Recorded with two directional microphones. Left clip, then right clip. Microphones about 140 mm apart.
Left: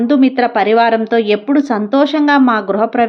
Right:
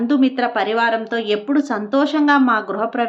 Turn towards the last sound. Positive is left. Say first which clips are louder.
# left 7 dB
turn(degrees=45)  # may be behind; listen again after turning